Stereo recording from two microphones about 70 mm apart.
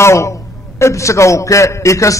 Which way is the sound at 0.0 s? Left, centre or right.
Left.